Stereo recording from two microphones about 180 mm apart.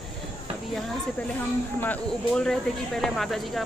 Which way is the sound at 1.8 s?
5° left (ahead or behind).